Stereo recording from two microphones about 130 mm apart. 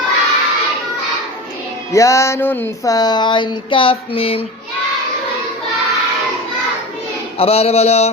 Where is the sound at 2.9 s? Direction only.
30° left (ahead or behind); by 4.4 s 45° left (ahead or behind).